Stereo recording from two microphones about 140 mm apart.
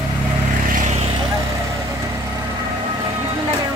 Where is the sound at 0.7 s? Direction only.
60° right (ahead or behind).